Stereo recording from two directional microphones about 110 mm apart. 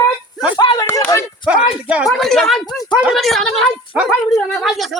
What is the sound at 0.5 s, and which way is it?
Speech, 45° left (ahead or behind).